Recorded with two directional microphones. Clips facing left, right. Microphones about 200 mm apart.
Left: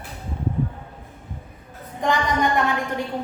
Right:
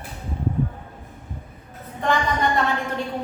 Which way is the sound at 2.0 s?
15° left (ahead or behind).